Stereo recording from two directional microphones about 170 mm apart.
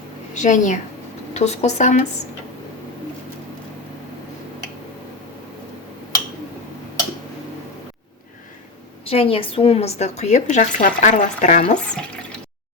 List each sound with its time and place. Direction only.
0.3 s a woman's voice: 45° left (ahead or behind)
9.0 s a woman's voice: 35° left (ahead or behind)